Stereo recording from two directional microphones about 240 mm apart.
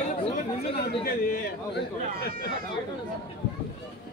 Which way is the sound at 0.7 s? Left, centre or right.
Left.